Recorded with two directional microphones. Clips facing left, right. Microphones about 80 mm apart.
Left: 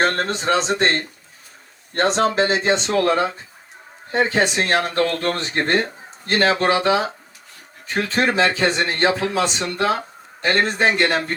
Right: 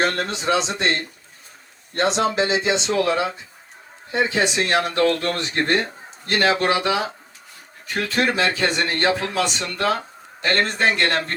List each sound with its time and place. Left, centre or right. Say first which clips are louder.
0.0 s speech: left 2 dB; left; by 10.0 s centre
10.4 s speech: left 2 dB; centre